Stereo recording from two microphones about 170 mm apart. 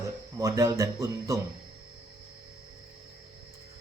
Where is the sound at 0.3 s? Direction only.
20° right (ahead or behind).